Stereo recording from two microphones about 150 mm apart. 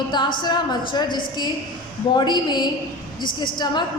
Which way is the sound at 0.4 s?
30° left (ahead or behind).